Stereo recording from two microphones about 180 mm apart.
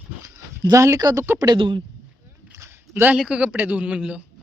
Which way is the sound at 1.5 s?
25° right (ahead or behind).